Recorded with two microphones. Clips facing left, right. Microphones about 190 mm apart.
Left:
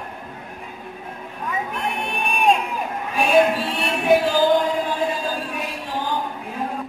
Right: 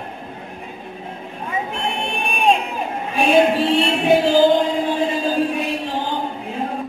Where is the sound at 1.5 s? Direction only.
25° right (ahead or behind).